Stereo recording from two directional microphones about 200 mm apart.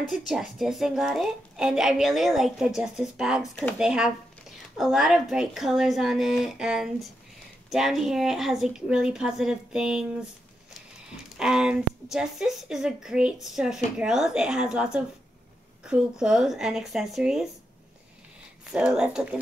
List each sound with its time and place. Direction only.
0.0 s a woman's voice: centre (ahead or behind)
11.3 s a woman's voice: 5° right (ahead or behind)
18.7 s a woman's voice: 5° right (ahead or behind)